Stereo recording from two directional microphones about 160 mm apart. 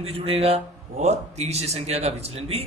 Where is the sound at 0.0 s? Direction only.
35° right (ahead or behind).